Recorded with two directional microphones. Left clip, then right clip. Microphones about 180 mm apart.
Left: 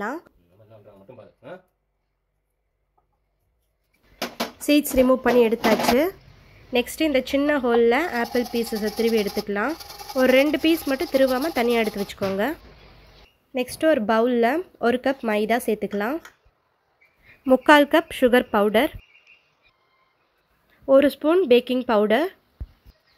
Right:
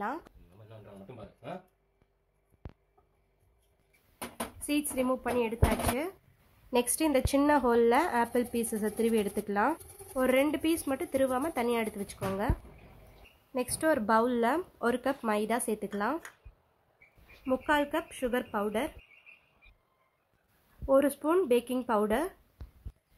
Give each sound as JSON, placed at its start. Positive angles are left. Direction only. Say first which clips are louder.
{"t": 4.6, "sound": "speech", "louder": "left 13 dB", "side_deg": 20}
{"t": 6.7, "sound": "speech", "louder": "left 6 dB", "side_deg": 5}
{"t": 13.6, "sound": "speech", "louder": "left 8 dB", "side_deg": 5}
{"t": 17.5, "sound": "speech", "louder": "left 14 dB", "side_deg": 30}
{"t": 20.8, "sound": "speech", "louder": "left 9 dB", "side_deg": 20}